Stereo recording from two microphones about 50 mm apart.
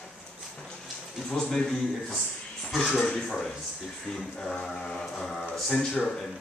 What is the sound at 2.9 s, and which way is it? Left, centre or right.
Speech, left.